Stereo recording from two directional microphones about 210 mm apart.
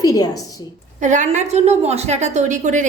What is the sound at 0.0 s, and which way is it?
Speech, 15° left (ahead or behind).